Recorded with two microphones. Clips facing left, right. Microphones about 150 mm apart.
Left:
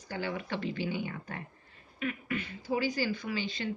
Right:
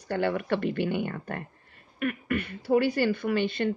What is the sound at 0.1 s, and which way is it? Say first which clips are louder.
Speech: right 9 dB; 65° right (ahead or behind).